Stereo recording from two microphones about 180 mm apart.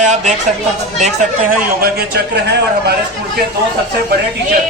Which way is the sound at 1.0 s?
50° right (ahead or behind).